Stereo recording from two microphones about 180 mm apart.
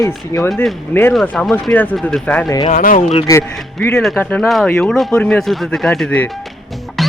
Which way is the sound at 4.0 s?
5° left (ahead or behind).